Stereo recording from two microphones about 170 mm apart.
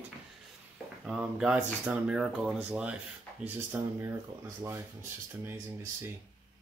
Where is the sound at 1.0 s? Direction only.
5° right (ahead or behind); by 4.8 s 20° right (ahead or behind).